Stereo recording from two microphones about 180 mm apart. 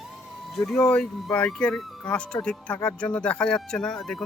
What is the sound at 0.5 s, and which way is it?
Speech, centre (ahead or behind).